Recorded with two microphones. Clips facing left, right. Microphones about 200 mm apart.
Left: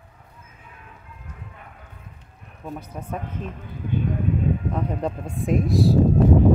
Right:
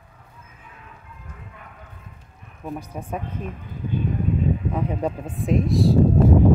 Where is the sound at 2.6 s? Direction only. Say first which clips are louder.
Right 2 dB; 10° right (ahead or behind).